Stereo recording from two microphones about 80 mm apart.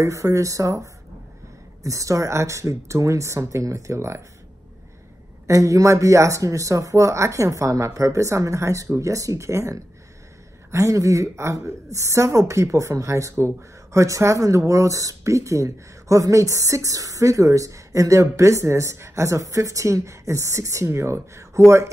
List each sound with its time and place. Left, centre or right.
0.0 s a woman's voice: right
5.5 s a woman's voice: right